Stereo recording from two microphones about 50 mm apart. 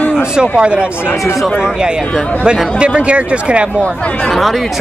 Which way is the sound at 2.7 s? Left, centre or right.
Right.